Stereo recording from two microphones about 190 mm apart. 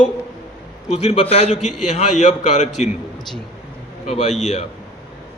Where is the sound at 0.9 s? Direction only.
35° left (ahead or behind).